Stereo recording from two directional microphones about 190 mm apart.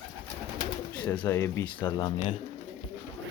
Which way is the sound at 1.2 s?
15° left (ahead or behind).